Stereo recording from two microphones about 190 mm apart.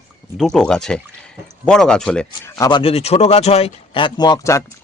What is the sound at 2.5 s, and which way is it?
Speech, 20° left (ahead or behind).